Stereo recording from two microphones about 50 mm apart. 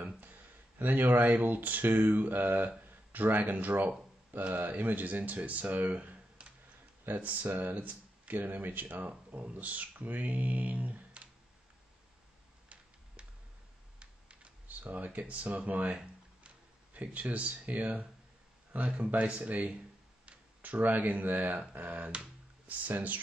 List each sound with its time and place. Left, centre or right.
0.2 s speech: right
14.7 s a sound: right
15.0 s speech: right